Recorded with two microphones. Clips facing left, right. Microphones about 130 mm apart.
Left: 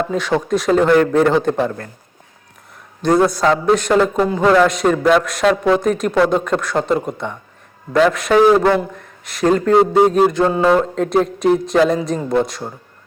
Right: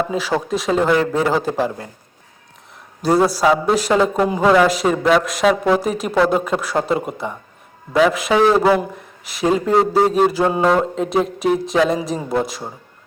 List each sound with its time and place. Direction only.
0.0 s speech: 5° right (ahead or behind)
3.0 s speech: 5° right (ahead or behind)
10.4 s speech: 15° right (ahead or behind)
10.7 s speech: 5° right (ahead or behind)